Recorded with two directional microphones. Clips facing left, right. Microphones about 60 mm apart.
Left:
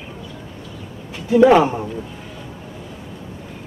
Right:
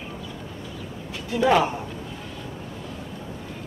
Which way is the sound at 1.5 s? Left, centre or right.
Centre.